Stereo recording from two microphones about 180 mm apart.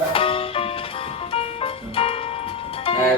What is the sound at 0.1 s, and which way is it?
Music, 30° left (ahead or behind).